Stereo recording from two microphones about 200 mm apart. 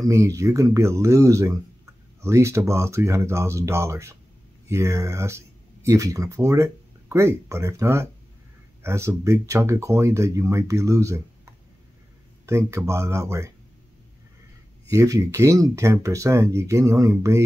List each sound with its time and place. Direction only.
0.0 s speech: 15° right (ahead or behind)
12.4 s speech: 15° right (ahead or behind)
14.9 s speech: 15° right (ahead or behind)